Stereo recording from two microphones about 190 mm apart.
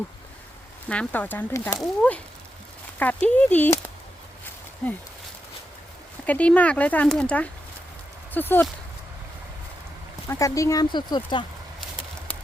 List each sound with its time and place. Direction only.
0.9 s speech: 5° left (ahead or behind)
6.2 s speech: 5° left (ahead or behind)
10.2 s speech: 15° left (ahead or behind)